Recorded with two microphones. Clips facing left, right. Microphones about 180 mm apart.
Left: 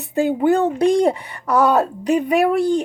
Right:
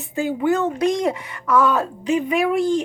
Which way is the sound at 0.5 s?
30° left (ahead or behind).